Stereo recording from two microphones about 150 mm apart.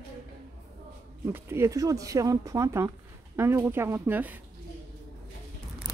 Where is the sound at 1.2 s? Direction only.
15° right (ahead or behind).